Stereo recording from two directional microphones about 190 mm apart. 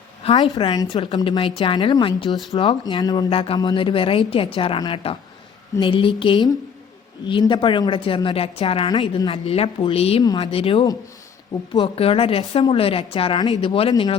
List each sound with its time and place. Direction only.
0.2 s a sound: 30° left (ahead or behind)
0.5 s a woman's voice: 20° left (ahead or behind)
10.2 s a woman's voice: 20° left (ahead or behind)